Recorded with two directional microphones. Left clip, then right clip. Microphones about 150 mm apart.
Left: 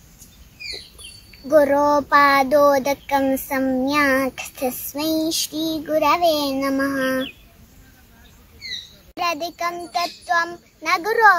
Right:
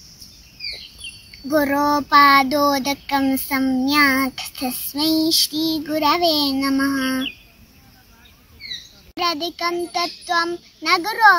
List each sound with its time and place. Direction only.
1.5 s child singing: centre (ahead or behind)
9.1 s child singing: centre (ahead or behind)